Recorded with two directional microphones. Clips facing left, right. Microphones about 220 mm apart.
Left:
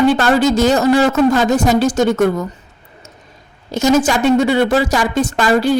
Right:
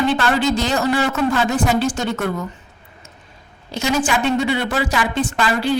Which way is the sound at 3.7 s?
45° left (ahead or behind).